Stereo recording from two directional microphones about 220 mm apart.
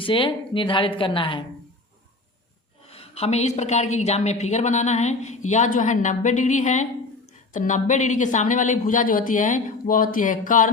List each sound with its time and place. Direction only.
0.0 s a woman's voice: 25° left (ahead or behind)
2.8 s a woman's voice: 25° left (ahead or behind)